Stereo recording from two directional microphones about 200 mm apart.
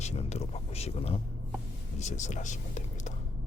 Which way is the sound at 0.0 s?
35° left (ahead or behind).